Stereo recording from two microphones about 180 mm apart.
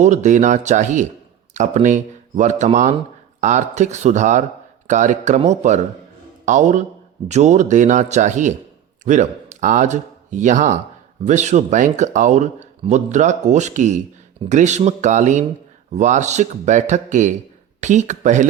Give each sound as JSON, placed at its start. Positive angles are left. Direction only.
{"t": 0.0, "sound": "a man's voice", "side_deg": -40}